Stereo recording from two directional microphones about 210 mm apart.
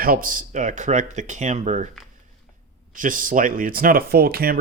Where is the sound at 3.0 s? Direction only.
40° right (ahead or behind).